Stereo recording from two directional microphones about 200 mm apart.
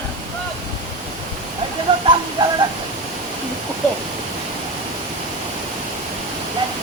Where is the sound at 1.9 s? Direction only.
25° right (ahead or behind).